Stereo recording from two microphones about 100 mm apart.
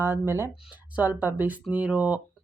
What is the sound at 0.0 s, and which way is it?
Speech, 25° right (ahead or behind).